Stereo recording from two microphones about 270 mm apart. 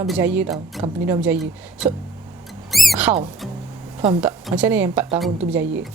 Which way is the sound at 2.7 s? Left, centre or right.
Centre.